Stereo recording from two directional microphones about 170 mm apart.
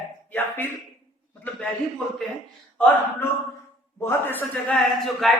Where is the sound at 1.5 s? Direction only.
10° left (ahead or behind).